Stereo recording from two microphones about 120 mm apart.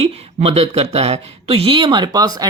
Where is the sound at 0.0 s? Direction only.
60° right (ahead or behind).